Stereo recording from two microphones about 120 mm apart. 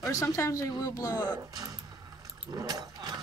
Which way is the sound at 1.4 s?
30° right (ahead or behind).